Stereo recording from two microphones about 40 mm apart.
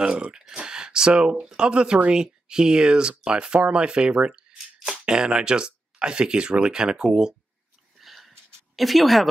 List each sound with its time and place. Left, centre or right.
0.0 s speech: right
8.0 s a sound: centre
8.7 s speech: centre